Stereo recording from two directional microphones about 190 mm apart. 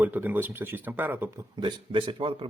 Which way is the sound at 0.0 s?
10° right (ahead or behind).